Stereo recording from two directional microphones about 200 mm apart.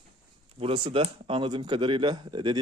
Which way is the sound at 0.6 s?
25° right (ahead or behind).